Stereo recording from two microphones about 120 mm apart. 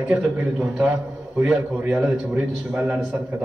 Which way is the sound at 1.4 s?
10° right (ahead or behind).